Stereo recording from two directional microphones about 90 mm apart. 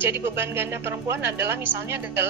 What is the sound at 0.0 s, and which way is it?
A woman's voice, 25° right (ahead or behind).